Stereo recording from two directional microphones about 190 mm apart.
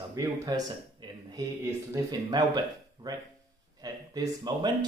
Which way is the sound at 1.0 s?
25° right (ahead or behind).